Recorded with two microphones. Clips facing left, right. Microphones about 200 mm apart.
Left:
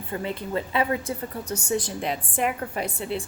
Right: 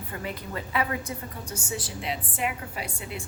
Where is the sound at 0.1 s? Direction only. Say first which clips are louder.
Left 7 dB; 25° left (ahead or behind).